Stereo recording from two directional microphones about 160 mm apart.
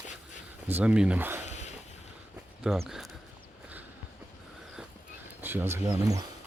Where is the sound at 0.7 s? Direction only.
5° right (ahead or behind).